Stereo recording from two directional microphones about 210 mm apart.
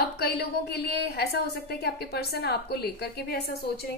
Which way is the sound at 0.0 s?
50° left (ahead or behind).